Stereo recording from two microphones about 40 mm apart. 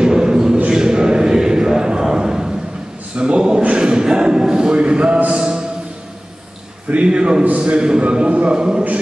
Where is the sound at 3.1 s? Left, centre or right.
Right.